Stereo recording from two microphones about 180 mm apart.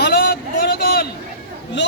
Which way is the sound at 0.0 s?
60° left (ahead or behind).